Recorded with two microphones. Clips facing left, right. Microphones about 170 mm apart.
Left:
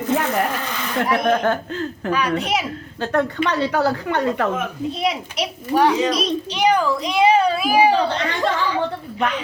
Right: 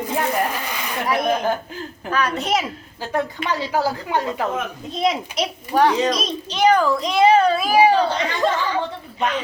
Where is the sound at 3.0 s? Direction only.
65° left (ahead or behind).